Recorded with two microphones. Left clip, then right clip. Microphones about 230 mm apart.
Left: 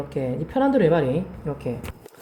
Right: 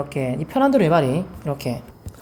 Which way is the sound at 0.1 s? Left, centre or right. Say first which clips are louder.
Right 2 dB; right.